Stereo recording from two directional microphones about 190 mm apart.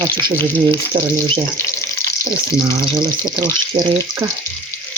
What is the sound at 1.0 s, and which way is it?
Speech, 25° right (ahead or behind).